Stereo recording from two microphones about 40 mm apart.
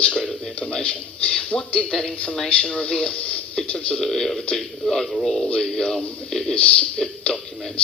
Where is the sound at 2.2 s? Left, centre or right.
Left.